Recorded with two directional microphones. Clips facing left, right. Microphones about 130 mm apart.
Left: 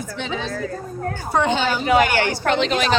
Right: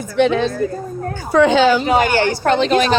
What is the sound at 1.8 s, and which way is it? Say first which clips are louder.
Speech: right 2 dB; 30° right (ahead or behind).